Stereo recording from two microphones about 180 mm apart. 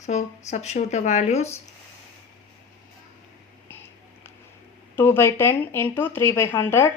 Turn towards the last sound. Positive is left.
turn(degrees=15)  # may be behind; listen again after turning